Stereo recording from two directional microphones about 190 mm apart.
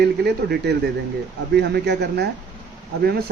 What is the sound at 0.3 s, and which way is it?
A man's voice, 60° right (ahead or behind).